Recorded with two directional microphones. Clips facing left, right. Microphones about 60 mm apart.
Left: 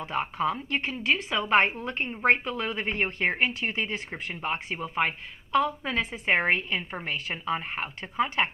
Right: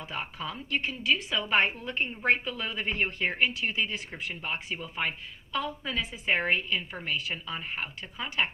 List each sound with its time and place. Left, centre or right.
0.0 s a woman's voice: left